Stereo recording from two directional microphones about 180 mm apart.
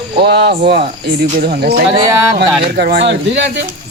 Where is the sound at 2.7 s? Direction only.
65° right (ahead or behind).